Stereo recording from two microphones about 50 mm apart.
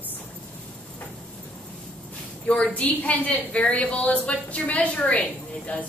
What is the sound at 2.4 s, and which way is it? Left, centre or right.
A woman's voice, left.